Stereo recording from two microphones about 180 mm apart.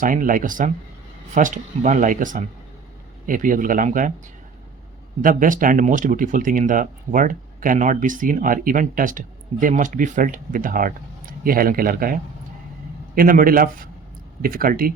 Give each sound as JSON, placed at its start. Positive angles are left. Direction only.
{"t": 0.0, "sound": "speech", "side_deg": -50}
{"t": 5.2, "sound": "speech", "side_deg": -50}